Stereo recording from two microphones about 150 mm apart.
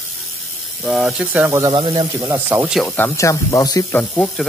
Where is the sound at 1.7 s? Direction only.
30° right (ahead or behind).